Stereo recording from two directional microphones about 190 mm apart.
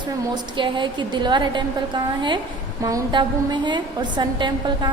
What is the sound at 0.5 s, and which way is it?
A woman's voice, 25° right (ahead or behind).